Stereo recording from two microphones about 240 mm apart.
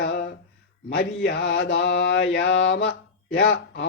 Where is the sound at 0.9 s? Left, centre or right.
Left.